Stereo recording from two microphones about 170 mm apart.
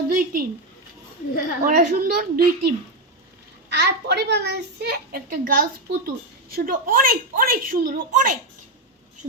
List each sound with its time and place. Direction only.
0.1 s a child's voice: 55° right (ahead or behind)
1.6 s a child's voice: 60° right (ahead or behind)
3.7 s a child's voice: 80° right; by 8.4 s 55° right (ahead or behind)